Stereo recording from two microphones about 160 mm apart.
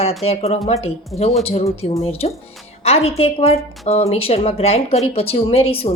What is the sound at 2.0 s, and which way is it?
Speech, 40° left (ahead or behind).